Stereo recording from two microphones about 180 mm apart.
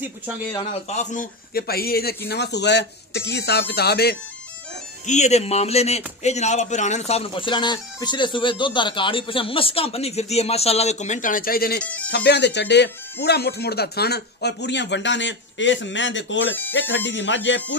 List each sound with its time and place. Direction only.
0.7 s a man's voice: 40° left (ahead or behind); by 4.2 s 65° left (ahead or behind)
5.0 s a man's voice: 40° left (ahead or behind); by 11.8 s 55° left (ahead or behind)
11.8 s speech: 5° left (ahead or behind)
12.3 s speech: 70° left (ahead or behind); by 17.6 s 90° left